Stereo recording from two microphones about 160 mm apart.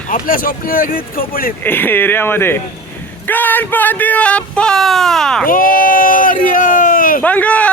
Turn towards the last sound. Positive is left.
turn(degrees=10)  # may be behind; listen again after turning